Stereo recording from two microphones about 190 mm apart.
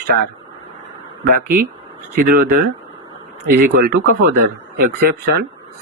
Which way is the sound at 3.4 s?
55° right (ahead or behind).